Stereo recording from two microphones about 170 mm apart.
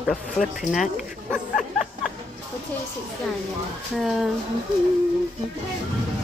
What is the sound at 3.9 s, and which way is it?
Speech, centre (ahead or behind).